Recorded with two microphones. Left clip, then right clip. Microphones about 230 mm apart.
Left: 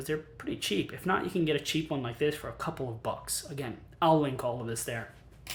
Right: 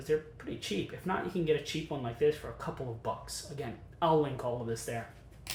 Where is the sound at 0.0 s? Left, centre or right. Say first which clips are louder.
Right 2 dB; left.